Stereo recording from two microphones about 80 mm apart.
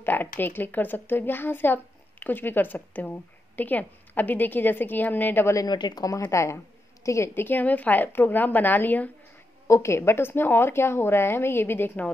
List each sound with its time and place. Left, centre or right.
0.0 s a woman's voice: left
5.7 s a woman's voice: left
7.3 s a woman's voice: left
9.7 s a woman's voice: left